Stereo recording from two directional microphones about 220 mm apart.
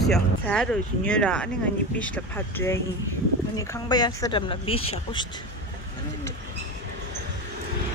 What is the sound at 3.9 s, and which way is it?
A woman's voice, 20° left (ahead or behind).